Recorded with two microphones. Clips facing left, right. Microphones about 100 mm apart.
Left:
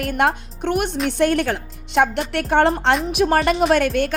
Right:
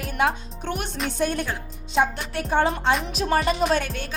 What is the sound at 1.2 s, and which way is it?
A woman's voice, 85° left.